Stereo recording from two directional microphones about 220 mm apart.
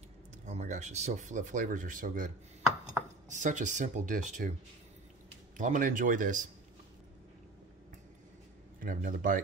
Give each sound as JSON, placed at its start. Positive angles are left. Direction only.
{"t": 0.5, "sound": "speech", "side_deg": -30}
{"t": 5.6, "sound": "speech", "side_deg": -35}
{"t": 8.7, "sound": "speech", "side_deg": -40}